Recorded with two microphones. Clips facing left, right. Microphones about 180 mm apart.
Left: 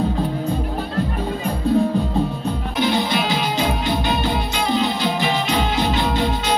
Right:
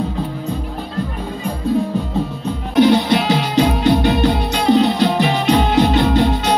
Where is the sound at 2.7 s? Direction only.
65° right (ahead or behind).